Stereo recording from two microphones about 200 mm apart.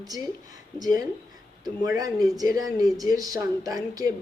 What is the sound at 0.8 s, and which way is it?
A man's voice, 20° right (ahead or behind).